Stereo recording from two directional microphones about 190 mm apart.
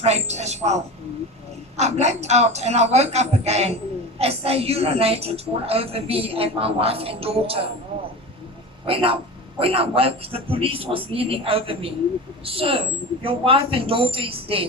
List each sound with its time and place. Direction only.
0.0 s a woman's voice: 35° right (ahead or behind)
8.9 s a man's voice: 30° right (ahead or behind)